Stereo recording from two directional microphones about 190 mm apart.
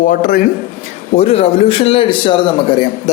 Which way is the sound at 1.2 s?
30° left (ahead or behind).